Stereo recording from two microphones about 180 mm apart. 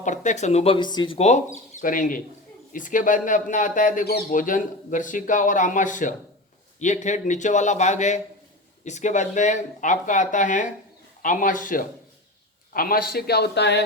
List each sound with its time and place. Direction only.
0.0 s speech: 45° left (ahead or behind)
1.5 s speech: 45° left (ahead or behind); by 13.8 s 70° left (ahead or behind)